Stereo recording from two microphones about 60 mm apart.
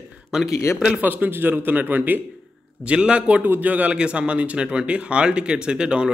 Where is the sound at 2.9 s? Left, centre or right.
Centre.